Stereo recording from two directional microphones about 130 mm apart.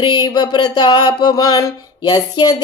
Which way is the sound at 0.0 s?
35° left (ahead or behind).